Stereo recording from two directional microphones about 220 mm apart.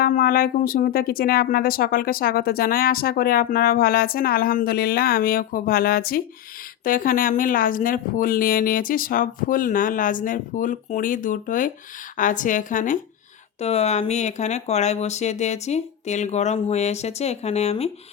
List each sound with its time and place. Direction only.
0.0 s speech: 40° left (ahead or behind)